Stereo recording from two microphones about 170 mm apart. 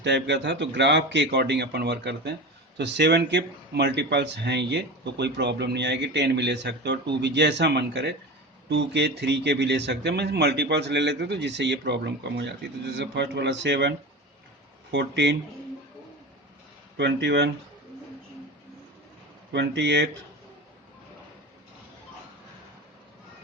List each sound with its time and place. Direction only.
0.0 s speech: 90° right
14.9 s speech: 90° right
17.0 s speech: 90° right
19.5 s speech: 90° right